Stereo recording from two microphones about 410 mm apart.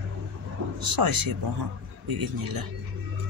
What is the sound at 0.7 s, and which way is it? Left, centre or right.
Speech, right.